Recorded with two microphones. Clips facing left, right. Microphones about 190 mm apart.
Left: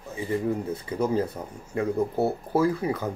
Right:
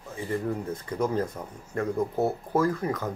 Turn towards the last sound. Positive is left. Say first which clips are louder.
# left 2 dB
turn(degrees=10)  # may be behind; listen again after turning